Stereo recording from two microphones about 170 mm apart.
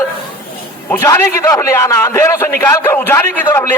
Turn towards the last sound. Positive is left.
turn(degrees=10)  # may be behind; listen again after turning